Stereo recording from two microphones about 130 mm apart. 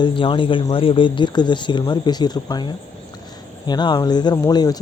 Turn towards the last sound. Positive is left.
turn(degrees=30)  # may be behind; listen again after turning